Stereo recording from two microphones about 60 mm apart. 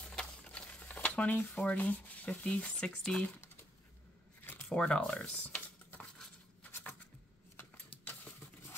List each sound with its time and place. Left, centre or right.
0.0 s stir: centre
2.6 s speech: centre
4.6 s speech: centre
7.5 s a sound: left